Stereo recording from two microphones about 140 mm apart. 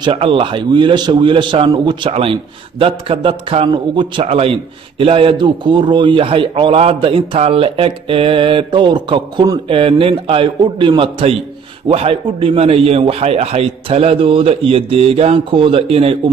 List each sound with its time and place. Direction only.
0.0 s a man's voice: 40° right (ahead or behind)